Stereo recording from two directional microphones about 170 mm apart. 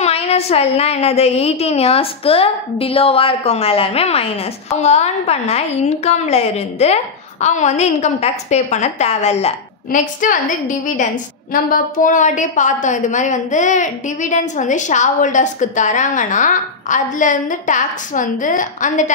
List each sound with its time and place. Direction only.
0.0 s a woman's voice: 40° left (ahead or behind)
9.8 s a woman's voice: 50° left (ahead or behind)